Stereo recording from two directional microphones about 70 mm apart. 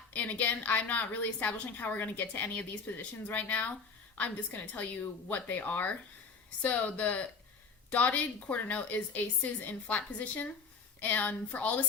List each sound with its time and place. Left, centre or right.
0.1 s a woman's voice: left